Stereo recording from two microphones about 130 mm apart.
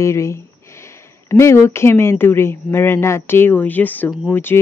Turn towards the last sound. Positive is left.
turn(degrees=15)  # may be behind; listen again after turning